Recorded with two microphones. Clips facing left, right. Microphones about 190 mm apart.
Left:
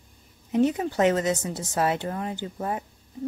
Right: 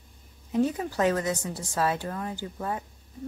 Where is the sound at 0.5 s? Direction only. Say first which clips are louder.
Left 3 dB; 20° left (ahead or behind).